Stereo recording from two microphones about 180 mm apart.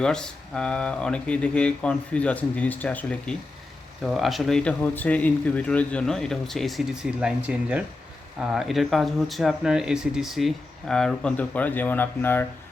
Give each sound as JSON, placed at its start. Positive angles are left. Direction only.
{"t": 0.0, "sound": "speech", "side_deg": 5}